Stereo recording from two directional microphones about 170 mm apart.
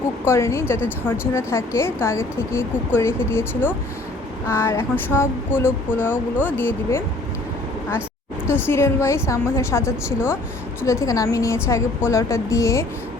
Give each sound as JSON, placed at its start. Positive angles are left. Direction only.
{"t": 0.3, "sound": "speech", "side_deg": 15}
{"t": 8.4, "sound": "speech", "side_deg": 15}